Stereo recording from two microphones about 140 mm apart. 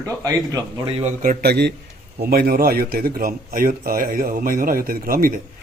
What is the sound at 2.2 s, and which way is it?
A man's voice, 90° right.